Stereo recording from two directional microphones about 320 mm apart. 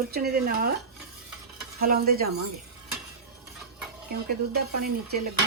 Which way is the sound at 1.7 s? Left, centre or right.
Right.